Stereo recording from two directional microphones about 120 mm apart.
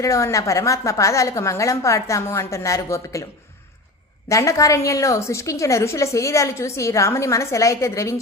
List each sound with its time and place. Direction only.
0.0 s a woman's voice: 25° left (ahead or behind)
4.3 s a woman's voice: 25° left (ahead or behind)